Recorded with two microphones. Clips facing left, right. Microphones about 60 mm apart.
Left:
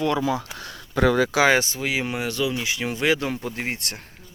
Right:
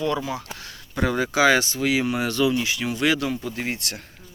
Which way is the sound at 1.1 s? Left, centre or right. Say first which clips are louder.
Left 1 dB; left.